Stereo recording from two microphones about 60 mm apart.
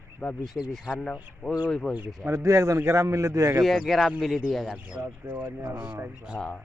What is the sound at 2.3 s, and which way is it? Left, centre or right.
A man's voice, right.